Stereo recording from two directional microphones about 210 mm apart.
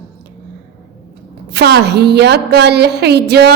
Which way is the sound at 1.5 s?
50° right (ahead or behind).